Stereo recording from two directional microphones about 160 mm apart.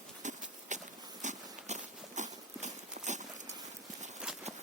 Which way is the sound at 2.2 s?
50° right (ahead or behind).